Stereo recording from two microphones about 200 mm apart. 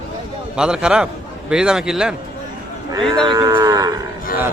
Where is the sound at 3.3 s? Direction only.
20° right (ahead or behind).